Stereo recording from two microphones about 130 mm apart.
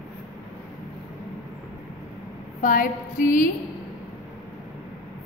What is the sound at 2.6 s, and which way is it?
Speech, 90° left.